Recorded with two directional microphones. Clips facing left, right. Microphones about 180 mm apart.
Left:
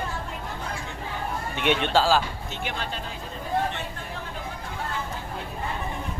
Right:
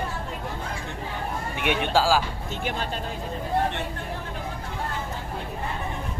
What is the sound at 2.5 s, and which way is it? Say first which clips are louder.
Speech: right 4 dB; 45° right (ahead or behind).